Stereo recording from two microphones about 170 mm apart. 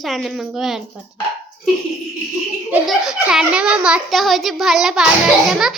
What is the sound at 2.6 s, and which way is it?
A child's voice, 5° right (ahead or behind).